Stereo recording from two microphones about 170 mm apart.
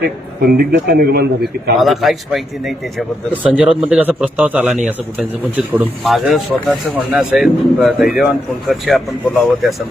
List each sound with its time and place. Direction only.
0.0 s a man's voice: 60° right (ahead or behind)
1.8 s speech: centre (ahead or behind)